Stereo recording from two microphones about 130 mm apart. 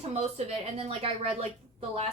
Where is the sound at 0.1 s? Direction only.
55° right (ahead or behind).